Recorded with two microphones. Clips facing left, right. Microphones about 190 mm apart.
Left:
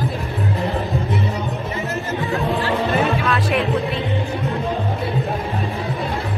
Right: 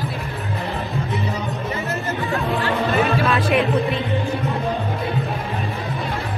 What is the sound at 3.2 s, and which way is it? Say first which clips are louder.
Music: right 1 dB; centre (ahead or behind).